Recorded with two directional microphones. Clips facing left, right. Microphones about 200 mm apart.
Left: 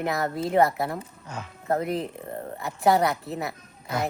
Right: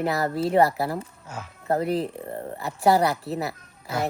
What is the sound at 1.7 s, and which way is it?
A woman's voice, 35° right (ahead or behind).